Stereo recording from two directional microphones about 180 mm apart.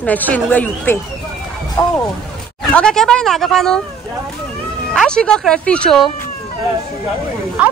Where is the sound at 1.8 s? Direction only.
25° left (ahead or behind).